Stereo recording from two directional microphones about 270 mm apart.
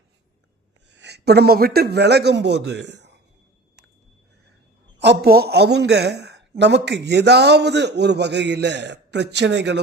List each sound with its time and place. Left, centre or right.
0.9 s speech: right
4.9 s a man's voice: right